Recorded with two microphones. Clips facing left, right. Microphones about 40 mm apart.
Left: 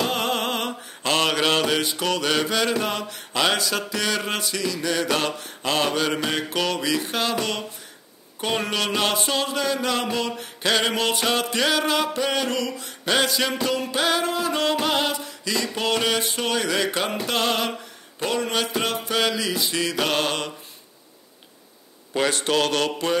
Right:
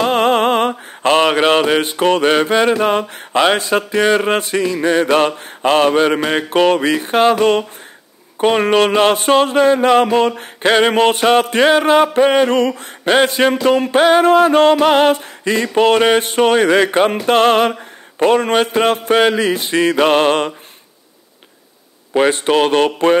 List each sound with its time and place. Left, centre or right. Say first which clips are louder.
0.0 s mantra: right 11 dB; right
22.1 s mantra: right 9 dB; right